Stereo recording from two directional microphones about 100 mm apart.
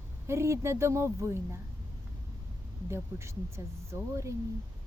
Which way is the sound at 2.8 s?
30° right (ahead or behind).